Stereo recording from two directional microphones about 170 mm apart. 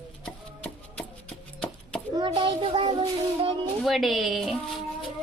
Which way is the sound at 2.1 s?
30° right (ahead or behind).